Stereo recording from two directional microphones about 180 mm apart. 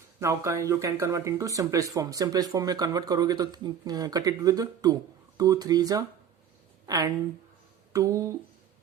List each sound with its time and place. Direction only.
0.2 s speech: 15° right (ahead or behind)